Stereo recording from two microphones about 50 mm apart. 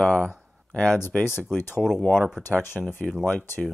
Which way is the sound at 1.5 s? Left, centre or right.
Left.